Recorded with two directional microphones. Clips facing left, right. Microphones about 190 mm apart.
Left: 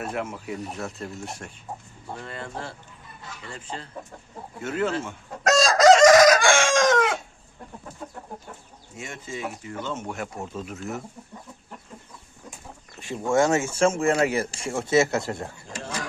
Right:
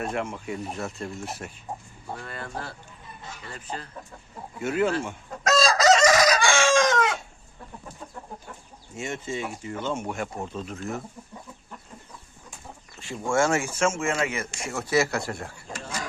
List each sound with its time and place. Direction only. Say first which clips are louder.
0.0 s speech: right 1 dB; 5° left (ahead or behind)
2.2 s speech: left 2 dB; 25° left (ahead or behind)
4.6 s speech: right 2 dB; 10° right (ahead or behind)
5.6 s chicken: left 6 dB; 45° left (ahead or behind)
9.0 s speech: right 4 dB; 25° right (ahead or behind)
9.8 s speech: right 3 dB; 10° right (ahead or behind)
10.2 s speech: right 1 dB; 5° left (ahead or behind)
13.0 s speech: left 2 dB; 20° left (ahead or behind)